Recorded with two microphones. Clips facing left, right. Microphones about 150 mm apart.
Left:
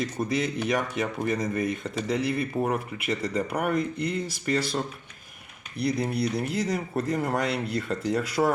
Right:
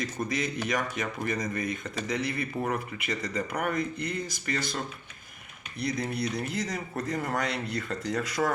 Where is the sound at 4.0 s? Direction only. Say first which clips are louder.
Left 4 dB; 30° left (ahead or behind).